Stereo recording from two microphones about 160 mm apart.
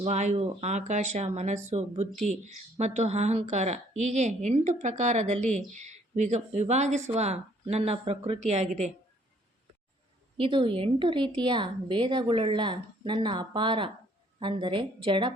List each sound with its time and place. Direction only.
0.0 s a woman's voice: 45° right (ahead or behind)
10.3 s a woman's voice: 30° right (ahead or behind)